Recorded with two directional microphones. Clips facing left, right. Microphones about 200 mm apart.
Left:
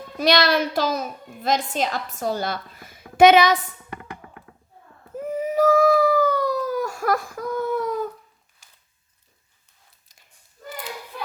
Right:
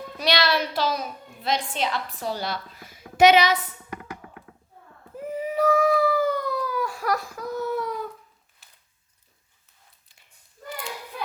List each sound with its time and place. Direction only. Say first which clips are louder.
0.2 s a woman's voice: left 4 dB; 50° left (ahead or behind)
5.1 s cat: left 4 dB; 45° left (ahead or behind)